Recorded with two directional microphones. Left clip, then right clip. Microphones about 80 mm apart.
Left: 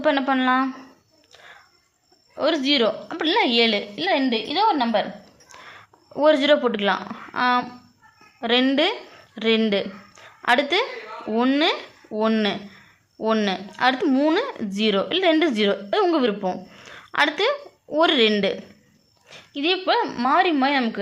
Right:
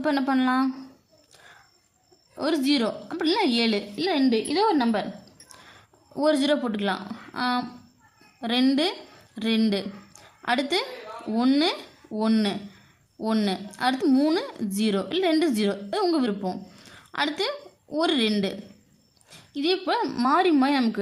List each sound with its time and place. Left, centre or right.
0.0 s a woman's voice: right
2.3 s a woman's voice: right
3.9 s a woman's voice: right
5.5 s a woman's voice: centre
16.4 s a sound: centre
17.9 s a woman's voice: centre
19.3 s a sound: centre
19.8 s a woman's voice: right